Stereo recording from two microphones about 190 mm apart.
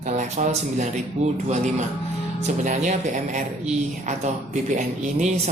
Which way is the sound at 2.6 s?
40° right (ahead or behind).